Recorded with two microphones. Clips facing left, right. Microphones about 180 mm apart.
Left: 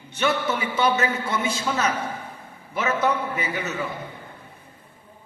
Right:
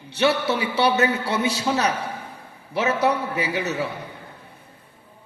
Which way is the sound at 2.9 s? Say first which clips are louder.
Right 2 dB; 70° right (ahead or behind).